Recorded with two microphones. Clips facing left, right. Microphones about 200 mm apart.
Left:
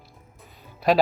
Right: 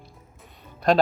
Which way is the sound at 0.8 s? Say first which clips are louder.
Even; 5° left (ahead or behind).